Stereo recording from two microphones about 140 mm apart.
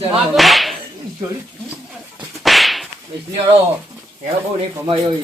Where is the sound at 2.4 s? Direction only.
Centre (ahead or behind).